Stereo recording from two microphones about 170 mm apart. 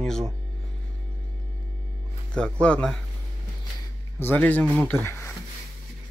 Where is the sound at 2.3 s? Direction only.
5° left (ahead or behind).